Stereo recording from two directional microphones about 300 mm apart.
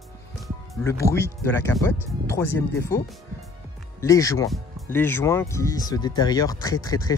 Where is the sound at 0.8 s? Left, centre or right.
Centre.